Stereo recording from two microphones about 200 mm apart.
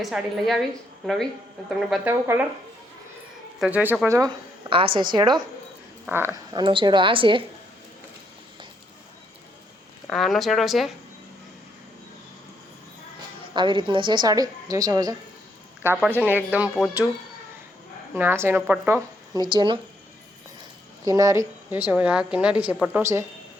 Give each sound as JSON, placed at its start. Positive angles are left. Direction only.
{"t": 0.0, "sound": "speech", "side_deg": 0}
{"t": 2.0, "sound": "speech", "side_deg": -10}
{"t": 3.6, "sound": "a woman's voice", "side_deg": -5}
{"t": 6.1, "sound": "speech", "side_deg": -10}
{"t": 6.5, "sound": "a woman's voice", "side_deg": -25}
{"t": 10.1, "sound": "speech", "side_deg": 0}
{"t": 13.5, "sound": "a woman's voice", "side_deg": -25}
{"t": 18.1, "sound": "speech", "side_deg": -10}
{"t": 21.0, "sound": "speech", "side_deg": -15}